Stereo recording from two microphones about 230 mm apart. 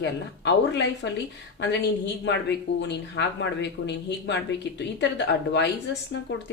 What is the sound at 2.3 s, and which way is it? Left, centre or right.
Speech, left.